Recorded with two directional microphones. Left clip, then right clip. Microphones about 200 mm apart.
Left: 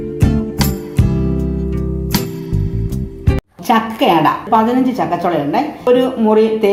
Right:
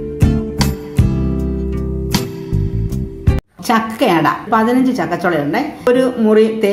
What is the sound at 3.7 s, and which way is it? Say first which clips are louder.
A woman's voice: left 1 dB; 25° right (ahead or behind).